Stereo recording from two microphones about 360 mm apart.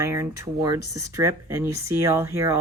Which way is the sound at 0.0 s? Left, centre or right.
Centre.